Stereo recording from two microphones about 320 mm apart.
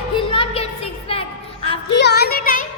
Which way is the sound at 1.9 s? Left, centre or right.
Left.